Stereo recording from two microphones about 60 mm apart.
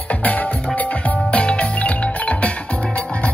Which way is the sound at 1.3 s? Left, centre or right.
Centre.